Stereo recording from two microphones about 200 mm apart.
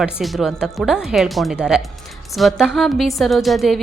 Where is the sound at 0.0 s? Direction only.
Centre (ahead or behind).